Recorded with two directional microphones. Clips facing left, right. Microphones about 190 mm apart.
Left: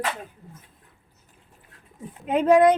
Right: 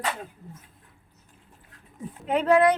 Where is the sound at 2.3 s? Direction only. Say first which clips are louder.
Left 3 dB; 20° left (ahead or behind).